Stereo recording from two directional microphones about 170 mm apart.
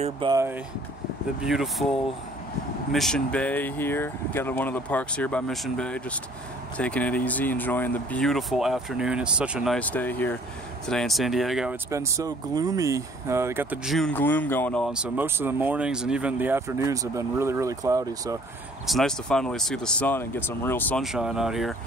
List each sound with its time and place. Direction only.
0.3 s speech: 15° right (ahead or behind)
1.4 s speech: centre (ahead or behind)
9.8 s speech: 10° left (ahead or behind)
11.9 s speech: 20° right (ahead or behind)
13.8 s speech: 5° left (ahead or behind)
14.9 s speech: 5° right (ahead or behind)
18.9 s speech: centre (ahead or behind)
21.0 s speech: 5° right (ahead or behind)